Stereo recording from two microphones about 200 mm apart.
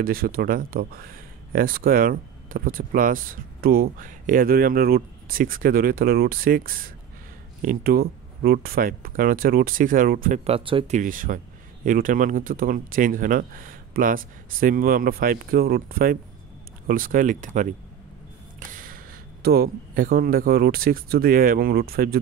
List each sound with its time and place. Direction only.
0.0 s speech: 45° right (ahead or behind)
10.4 s speech: 25° right (ahead or behind)
11.0 s speech: 45° right (ahead or behind)